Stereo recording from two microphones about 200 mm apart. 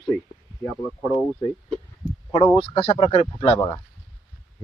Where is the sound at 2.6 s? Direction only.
30° left (ahead or behind).